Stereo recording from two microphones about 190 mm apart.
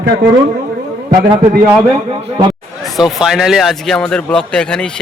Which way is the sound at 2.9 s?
Centre (ahead or behind).